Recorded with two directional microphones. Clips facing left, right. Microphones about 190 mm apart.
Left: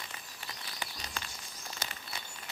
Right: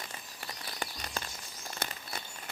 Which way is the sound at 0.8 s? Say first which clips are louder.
Right 4 dB; 50° right (ahead or behind).